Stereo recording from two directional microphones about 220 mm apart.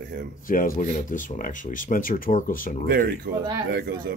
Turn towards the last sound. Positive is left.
turn(degrees=-45)  # may be behind; listen again after turning